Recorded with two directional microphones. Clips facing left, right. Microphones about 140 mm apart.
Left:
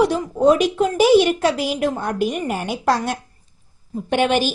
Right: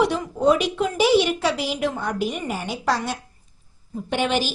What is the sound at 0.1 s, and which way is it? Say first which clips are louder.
A woman's voice: left 4 dB; 45° left (ahead or behind).